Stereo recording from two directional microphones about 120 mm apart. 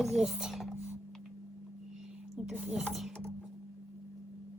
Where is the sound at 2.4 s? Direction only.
10° right (ahead or behind).